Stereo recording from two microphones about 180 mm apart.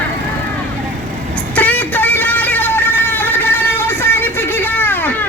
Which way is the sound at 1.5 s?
10° left (ahead or behind).